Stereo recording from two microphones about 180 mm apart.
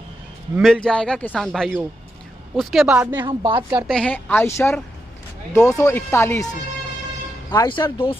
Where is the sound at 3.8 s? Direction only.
5° left (ahead or behind).